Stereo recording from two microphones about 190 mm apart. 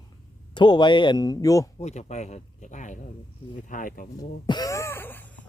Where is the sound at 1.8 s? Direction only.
35° left (ahead or behind).